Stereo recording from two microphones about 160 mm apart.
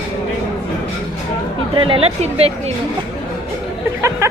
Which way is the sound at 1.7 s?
35° right (ahead or behind).